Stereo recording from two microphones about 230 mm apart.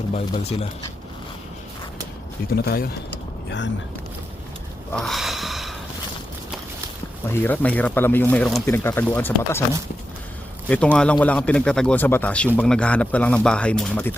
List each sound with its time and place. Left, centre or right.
0.1 s speech: left
2.6 s speech: left
4.9 s snort: centre
7.4 s speech: centre
10.7 s speech: centre